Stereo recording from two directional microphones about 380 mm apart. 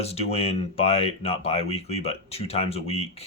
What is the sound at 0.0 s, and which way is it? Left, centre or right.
Speech, centre.